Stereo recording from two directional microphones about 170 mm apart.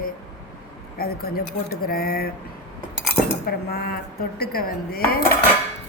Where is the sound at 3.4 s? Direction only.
65° left (ahead or behind).